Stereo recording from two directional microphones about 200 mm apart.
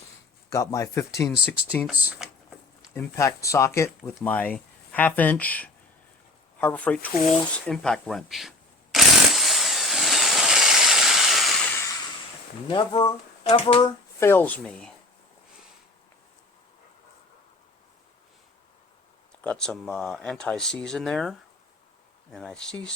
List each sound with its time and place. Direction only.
0.5 s speech: 15° left (ahead or behind)
1.9 s speech: 5° right (ahead or behind)
2.9 s speech: 15° left (ahead or behind)
7.7 s shuffling cards: 5° left (ahead or behind)
12.6 s speech: 25° left (ahead or behind)
14.2 s speech: 10° left (ahead or behind)
19.4 s speech: 5° left (ahead or behind)